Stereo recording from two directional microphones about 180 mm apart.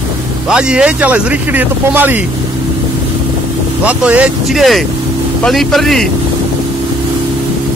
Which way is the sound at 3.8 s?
5° right (ahead or behind).